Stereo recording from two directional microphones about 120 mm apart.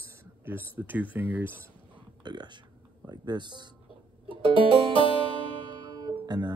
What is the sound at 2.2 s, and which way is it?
Speech, 40° right (ahead or behind).